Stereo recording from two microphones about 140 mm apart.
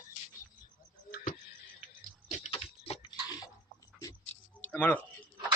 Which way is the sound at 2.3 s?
50° left (ahead or behind).